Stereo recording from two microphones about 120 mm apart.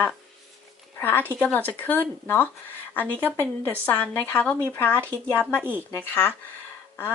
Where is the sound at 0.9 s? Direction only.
15° left (ahead or behind).